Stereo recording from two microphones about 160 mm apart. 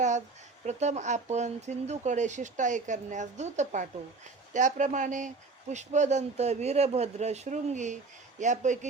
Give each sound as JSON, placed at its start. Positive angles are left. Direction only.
{"t": 0.6, "sound": "speech", "side_deg": -45}